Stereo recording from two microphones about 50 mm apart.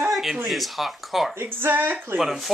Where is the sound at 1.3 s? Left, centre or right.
Right.